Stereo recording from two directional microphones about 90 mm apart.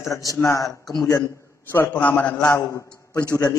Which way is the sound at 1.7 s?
20° left (ahead or behind).